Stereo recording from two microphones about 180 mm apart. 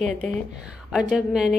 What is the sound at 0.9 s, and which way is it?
Speech, 5° right (ahead or behind).